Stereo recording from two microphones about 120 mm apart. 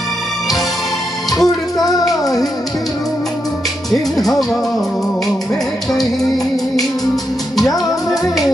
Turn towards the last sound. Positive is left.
turn(degrees=0)  # may be behind; listen again after turning